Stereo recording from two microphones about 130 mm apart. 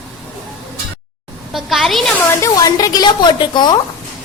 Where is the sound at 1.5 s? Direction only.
Centre (ahead or behind).